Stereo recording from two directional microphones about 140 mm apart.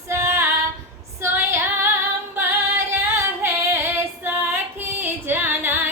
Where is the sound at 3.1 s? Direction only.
15° right (ahead or behind).